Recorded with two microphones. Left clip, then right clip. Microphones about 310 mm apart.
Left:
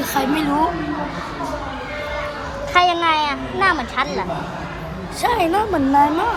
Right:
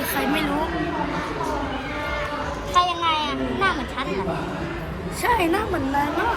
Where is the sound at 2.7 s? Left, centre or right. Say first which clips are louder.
Left 5 dB; left.